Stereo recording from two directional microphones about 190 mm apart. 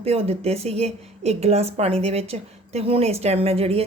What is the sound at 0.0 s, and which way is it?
A woman's voice, 30° right (ahead or behind).